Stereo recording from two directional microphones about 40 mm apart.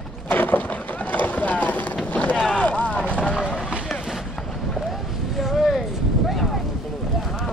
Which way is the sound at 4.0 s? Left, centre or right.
Centre.